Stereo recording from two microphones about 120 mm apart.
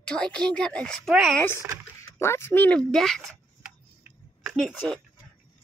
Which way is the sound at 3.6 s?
10° right (ahead or behind).